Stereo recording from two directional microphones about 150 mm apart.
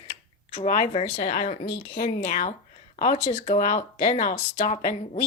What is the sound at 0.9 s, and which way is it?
Speech, 45° left (ahead or behind).